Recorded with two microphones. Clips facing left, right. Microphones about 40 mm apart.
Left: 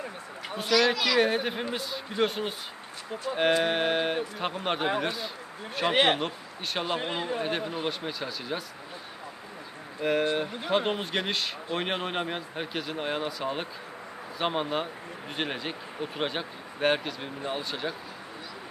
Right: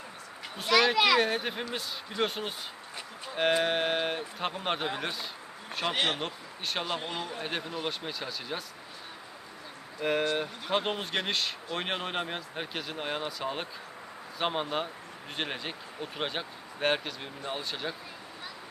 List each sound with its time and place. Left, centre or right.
0.7 s speech: centre
1.2 s speech: centre
3.6 s speech: centre
5.9 s a man's voice: left
6.1 s a man's voice: centre
7.0 s a man's voice: left
7.9 s speech: centre
10.0 s speech: centre